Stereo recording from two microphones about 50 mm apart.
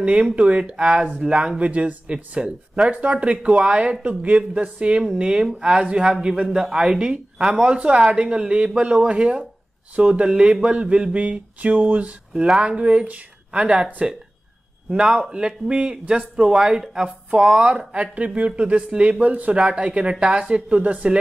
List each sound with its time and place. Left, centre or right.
0.0 s a man's voice: right
16.5 s a man's voice: centre
17.9 s speech: right
19.1 s speech: right